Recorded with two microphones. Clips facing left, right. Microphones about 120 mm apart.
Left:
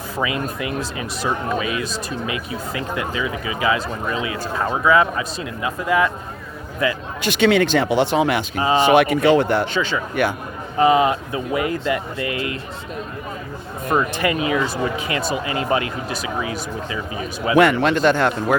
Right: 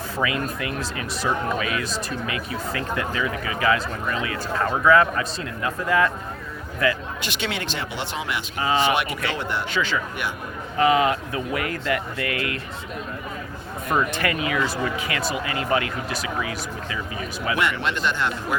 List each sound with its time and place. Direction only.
0.2 s speech: 20° left (ahead or behind)
7.3 s speech: 50° left (ahead or behind)
8.5 s speech: 25° left (ahead or behind)
8.8 s speech: 45° left (ahead or behind)
9.7 s speech: 20° left (ahead or behind)
13.9 s speech: 20° left (ahead or behind)
17.6 s speech: 45° left (ahead or behind)